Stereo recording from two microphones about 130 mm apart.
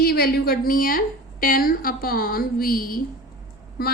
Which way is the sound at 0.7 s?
90° left.